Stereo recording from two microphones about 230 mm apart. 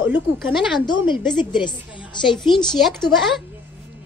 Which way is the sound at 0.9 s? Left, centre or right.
Centre.